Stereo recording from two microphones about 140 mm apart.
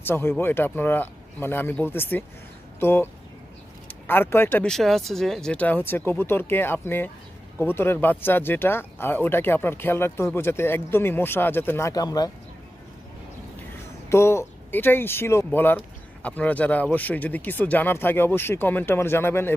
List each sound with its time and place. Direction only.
0.0 s speech: 15° left (ahead or behind)
4.1 s speech: 15° left (ahead or behind)
4.6 s speech: centre (ahead or behind); by 12.3 s 25° left (ahead or behind)
14.0 s speech: 20° left (ahead or behind)